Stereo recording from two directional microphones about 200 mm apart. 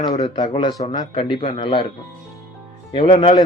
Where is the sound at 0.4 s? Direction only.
25° left (ahead or behind).